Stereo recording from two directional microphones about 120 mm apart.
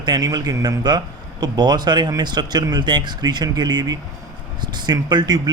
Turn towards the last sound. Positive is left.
turn(degrees=-35)  # may be behind; listen again after turning